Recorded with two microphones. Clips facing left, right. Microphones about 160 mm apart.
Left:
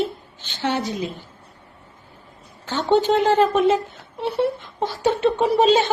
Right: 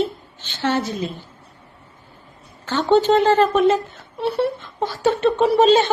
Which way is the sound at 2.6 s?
10° left (ahead or behind).